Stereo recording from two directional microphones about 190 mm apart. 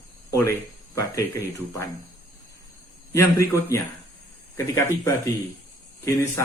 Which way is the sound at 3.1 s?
15° left (ahead or behind).